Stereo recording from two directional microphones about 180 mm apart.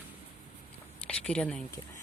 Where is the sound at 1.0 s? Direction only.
5° left (ahead or behind).